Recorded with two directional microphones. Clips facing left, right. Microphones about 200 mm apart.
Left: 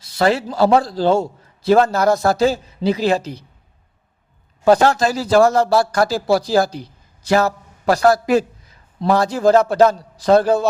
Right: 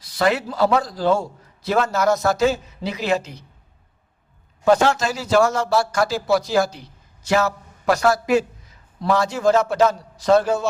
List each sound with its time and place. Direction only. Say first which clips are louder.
0.0 s a sound: left 3 dB; 30° left (ahead or behind)
0.5 s a man's voice: left 4 dB; 30° left (ahead or behind)
4.6 s a man's voice: left 3 dB; 35° left (ahead or behind)